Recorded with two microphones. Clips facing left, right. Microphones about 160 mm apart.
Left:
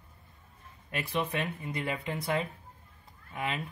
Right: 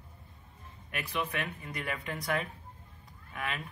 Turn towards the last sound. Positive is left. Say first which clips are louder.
# left 3 dB
turn(degrees=25)  # may be behind; listen again after turning